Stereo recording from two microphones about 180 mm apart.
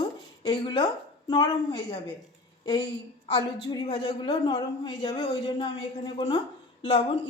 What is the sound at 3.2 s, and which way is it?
Speech, 30° left (ahead or behind).